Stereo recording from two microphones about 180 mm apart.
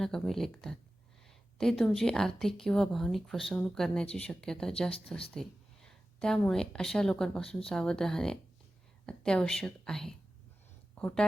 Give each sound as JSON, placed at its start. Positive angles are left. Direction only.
{"t": 0.0, "sound": "speech", "side_deg": 0}